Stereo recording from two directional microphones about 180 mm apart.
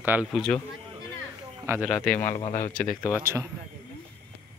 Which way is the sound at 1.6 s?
10° right (ahead or behind).